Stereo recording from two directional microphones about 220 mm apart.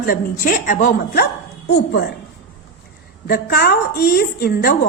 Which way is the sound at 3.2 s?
45° left (ahead or behind).